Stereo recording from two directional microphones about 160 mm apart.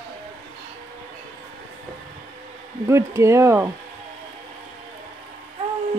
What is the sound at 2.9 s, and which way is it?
Speech, 15° right (ahead or behind).